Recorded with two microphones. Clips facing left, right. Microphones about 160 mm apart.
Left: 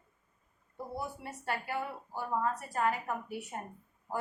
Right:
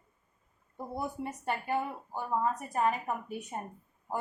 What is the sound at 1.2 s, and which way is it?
A woman's voice, 20° right (ahead or behind).